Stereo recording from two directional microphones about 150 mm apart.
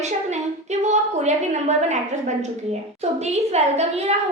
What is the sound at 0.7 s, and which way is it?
A woman's voice, 50° right (ahead or behind).